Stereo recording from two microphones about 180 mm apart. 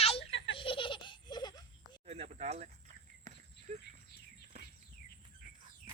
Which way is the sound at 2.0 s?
35° right (ahead or behind).